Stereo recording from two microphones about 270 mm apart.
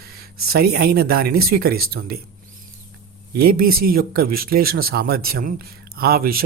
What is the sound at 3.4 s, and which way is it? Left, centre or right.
Speech, right.